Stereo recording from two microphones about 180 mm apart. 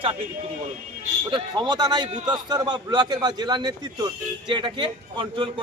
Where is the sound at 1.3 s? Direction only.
20° right (ahead or behind).